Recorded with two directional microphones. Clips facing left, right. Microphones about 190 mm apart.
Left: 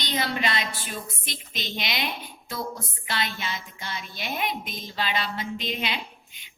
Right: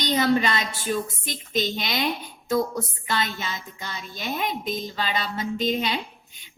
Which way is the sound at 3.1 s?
45° right (ahead or behind).